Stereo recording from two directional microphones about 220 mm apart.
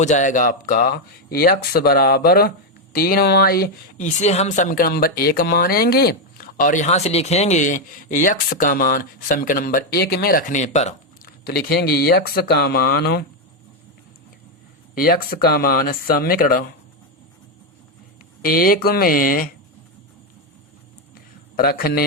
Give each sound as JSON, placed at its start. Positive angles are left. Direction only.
{"t": 0.0, "sound": "speech", "side_deg": 35}
{"t": 11.4, "sound": "speech", "side_deg": 45}
{"t": 14.9, "sound": "speech", "side_deg": 40}
{"t": 18.4, "sound": "speech", "side_deg": 40}
{"t": 21.5, "sound": "a man's voice", "side_deg": 45}